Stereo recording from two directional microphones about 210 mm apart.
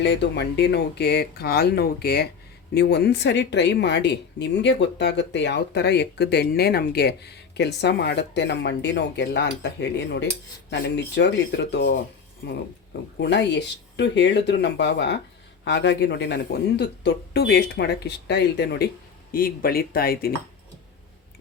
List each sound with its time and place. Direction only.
0.0 s speech: 55° left (ahead or behind)